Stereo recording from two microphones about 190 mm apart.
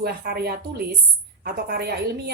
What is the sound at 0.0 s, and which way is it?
A woman's voice, 55° right (ahead or behind).